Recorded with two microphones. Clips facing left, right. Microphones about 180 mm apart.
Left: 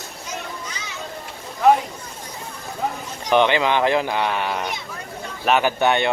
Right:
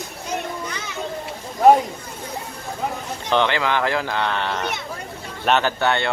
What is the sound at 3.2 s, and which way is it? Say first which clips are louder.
Speech: left 3 dB; 15° left (ahead or behind).